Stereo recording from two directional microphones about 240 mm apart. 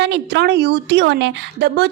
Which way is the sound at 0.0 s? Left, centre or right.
Right.